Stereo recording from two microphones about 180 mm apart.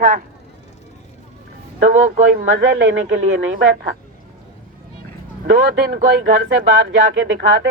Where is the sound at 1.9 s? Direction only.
45° right (ahead or behind).